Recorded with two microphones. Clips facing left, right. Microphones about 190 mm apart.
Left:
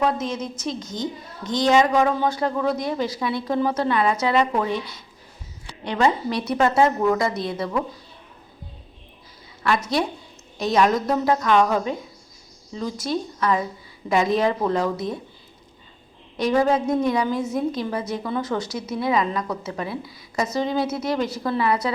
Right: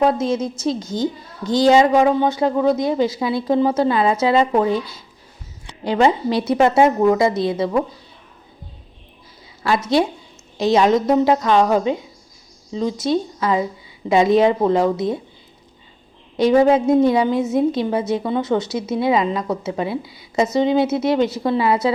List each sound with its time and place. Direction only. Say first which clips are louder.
0.0 s a woman's voice: right 6 dB; 30° right (ahead or behind)
5.8 s a woman's voice: right 5 dB; 30° right (ahead or behind)
10.6 s a woman's voice: right 5 dB; 25° right (ahead or behind)
16.4 s a woman's voice: right 6 dB; 25° right (ahead or behind)